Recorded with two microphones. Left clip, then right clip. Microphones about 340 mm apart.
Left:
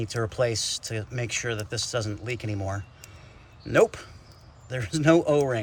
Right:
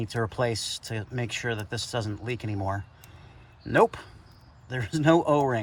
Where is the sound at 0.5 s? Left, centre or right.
Left.